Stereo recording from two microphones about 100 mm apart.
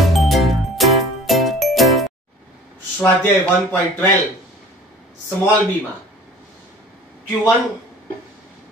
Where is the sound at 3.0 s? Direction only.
20° left (ahead or behind).